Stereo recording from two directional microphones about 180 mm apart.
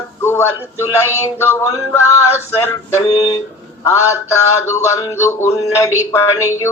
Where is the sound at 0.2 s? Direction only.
15° left (ahead or behind).